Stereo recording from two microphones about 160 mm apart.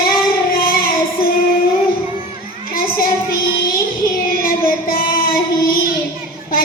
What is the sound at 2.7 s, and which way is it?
Child singing, 65° left (ahead or behind).